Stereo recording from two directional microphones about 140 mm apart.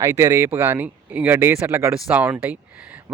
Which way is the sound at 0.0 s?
20° right (ahead or behind).